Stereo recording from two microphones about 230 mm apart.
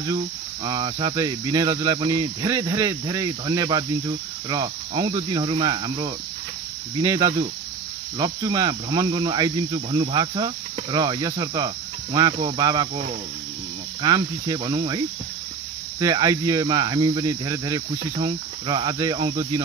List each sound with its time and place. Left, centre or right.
0.7 s cricket: right
16.0 s cricket: centre